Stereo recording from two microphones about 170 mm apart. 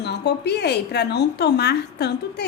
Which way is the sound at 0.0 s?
75° left (ahead or behind).